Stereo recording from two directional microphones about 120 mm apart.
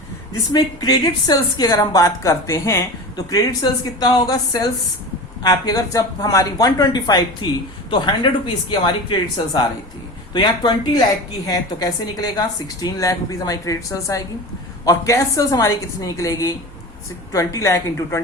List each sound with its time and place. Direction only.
0.5 s a woman's voice: 35° left (ahead or behind)
10.3 s a woman's voice: 40° left (ahead or behind)